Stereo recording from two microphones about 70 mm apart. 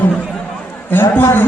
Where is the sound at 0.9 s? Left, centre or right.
Left.